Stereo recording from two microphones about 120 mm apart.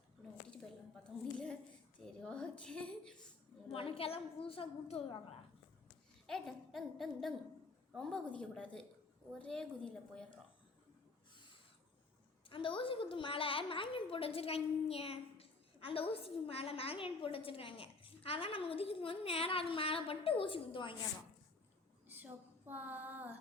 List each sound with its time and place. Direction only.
1.1 s a sound: centre (ahead or behind)
2.0 s a woman's voice: 5° left (ahead or behind)
3.7 s a woman's voice: 50° left (ahead or behind)
6.2 s a woman's voice: 5° left (ahead or behind)
12.5 s a woman's voice: 45° left (ahead or behind)
22.1 s female singing: 15° right (ahead or behind)